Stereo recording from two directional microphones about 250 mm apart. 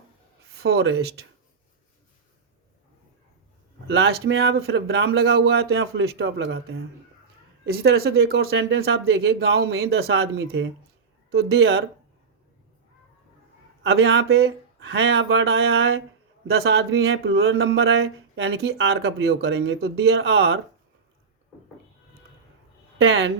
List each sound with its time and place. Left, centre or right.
0.5 s speech: right
3.8 s speech: right
10.0 s speech: right
13.8 s speech: right
17.4 s speech: right
23.0 s speech: right